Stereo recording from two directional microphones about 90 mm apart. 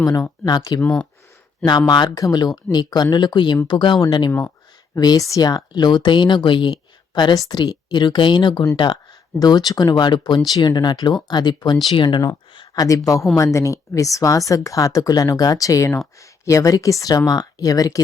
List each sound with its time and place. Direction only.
0.0 s speech: 40° left (ahead or behind)
0.8 s speech: 10° left (ahead or behind)
1.9 s speech: 55° left (ahead or behind)
4.3 s speech: 20° left (ahead or behind)
4.9 s speech: 50° left (ahead or behind)
9.4 s speech: 50° left (ahead or behind)
12.7 s speech: 45° left (ahead or behind)